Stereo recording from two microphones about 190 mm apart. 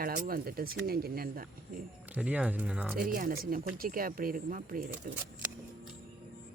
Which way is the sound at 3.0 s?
45° right (ahead or behind).